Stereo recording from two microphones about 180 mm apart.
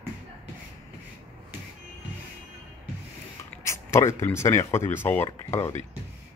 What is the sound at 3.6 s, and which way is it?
Speech, 15° left (ahead or behind).